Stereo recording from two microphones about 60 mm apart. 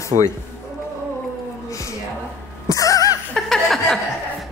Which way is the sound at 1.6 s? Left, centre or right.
Left.